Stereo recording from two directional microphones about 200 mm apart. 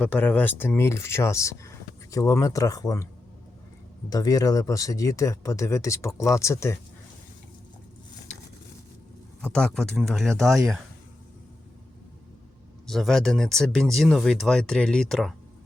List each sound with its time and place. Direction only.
0.0 s speech: 10° left (ahead or behind)
4.1 s speech: 20° left (ahead or behind)
9.4 s speech: 5° left (ahead or behind)
12.9 s speech: centre (ahead or behind)